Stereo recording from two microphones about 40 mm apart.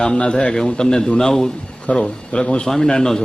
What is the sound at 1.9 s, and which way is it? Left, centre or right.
Speech, left.